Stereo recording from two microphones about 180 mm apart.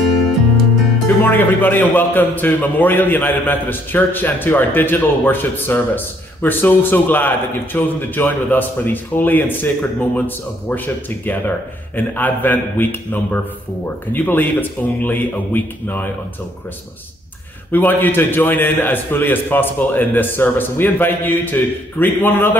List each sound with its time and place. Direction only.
1.0 s a man's voice: 10° left (ahead or behind)
17.6 s a man's voice: 10° left (ahead or behind)